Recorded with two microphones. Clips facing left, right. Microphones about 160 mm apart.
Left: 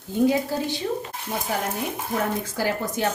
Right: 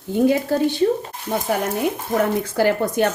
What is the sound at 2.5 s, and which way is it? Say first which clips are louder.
Speech: right 10 dB; 65° right (ahead or behind).